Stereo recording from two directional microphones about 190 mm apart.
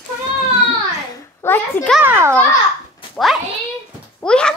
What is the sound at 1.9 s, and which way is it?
Speech, 10° right (ahead or behind).